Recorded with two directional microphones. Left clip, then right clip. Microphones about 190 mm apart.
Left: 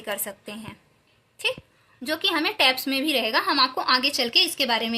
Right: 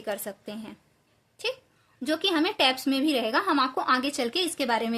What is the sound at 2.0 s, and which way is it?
A woman's voice, 50° right (ahead or behind).